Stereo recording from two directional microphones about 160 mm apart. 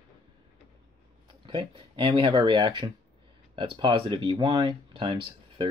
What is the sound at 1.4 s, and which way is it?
Speech, 30° right (ahead or behind).